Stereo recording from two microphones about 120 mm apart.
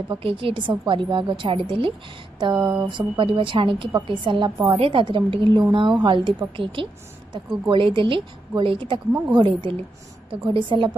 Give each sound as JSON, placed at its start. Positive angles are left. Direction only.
{"t": 0.2, "sound": "a woman's voice", "side_deg": -50}